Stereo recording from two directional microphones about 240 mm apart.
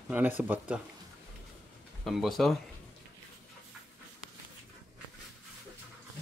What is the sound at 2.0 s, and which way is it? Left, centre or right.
Speech, centre.